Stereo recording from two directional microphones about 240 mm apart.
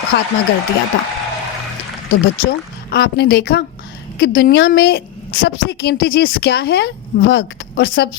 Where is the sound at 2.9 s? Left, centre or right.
Left.